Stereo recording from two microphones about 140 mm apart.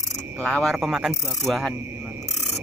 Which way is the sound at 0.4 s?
5° left (ahead or behind).